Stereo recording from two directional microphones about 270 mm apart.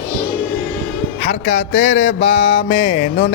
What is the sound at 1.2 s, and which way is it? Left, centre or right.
Speech, left.